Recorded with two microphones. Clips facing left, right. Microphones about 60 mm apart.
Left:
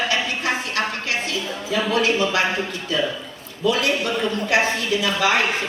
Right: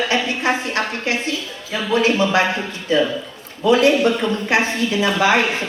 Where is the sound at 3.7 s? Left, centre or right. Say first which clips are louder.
Right 7 dB; right.